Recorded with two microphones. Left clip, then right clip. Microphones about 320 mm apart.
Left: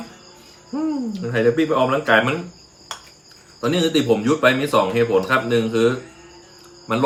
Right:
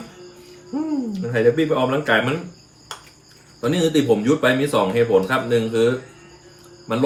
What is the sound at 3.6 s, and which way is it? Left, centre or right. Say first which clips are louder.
A man's voice: even; centre.